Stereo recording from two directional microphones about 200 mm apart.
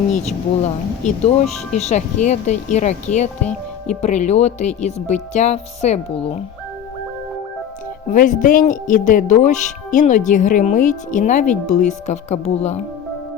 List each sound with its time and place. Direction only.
0.1 s speech: 35° left (ahead or behind)
8.1 s speech: 40° left (ahead or behind)